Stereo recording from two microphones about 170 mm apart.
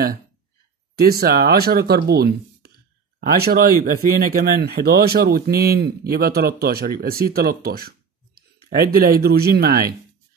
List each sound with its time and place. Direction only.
0.9 s speech: 65° right (ahead or behind)
8.4 s a sound: 60° right (ahead or behind)
9.2 s speech: 65° right (ahead or behind)